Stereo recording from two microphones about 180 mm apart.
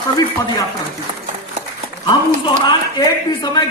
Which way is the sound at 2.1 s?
25° left (ahead or behind).